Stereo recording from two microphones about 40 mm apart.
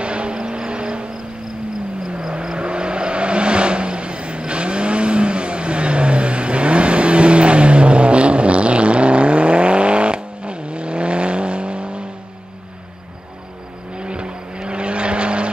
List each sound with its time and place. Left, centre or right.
0.0 s vehicle: right
13.9 s vehicle: right